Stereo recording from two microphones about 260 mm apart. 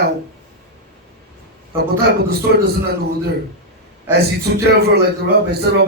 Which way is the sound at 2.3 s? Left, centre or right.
Right.